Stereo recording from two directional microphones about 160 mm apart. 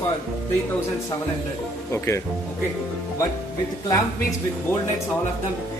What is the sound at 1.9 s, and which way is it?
Speech, 15° left (ahead or behind).